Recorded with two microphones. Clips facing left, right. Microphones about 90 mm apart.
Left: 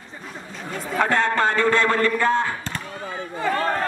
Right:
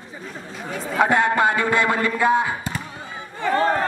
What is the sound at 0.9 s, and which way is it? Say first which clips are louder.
A man's voice: right 2 dB; 10° right (ahead or behind).